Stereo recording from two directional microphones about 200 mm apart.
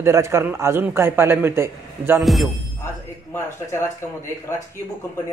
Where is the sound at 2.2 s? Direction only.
Centre (ahead or behind).